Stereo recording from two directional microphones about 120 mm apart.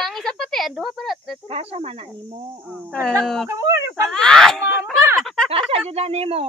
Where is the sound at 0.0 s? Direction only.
5° left (ahead or behind).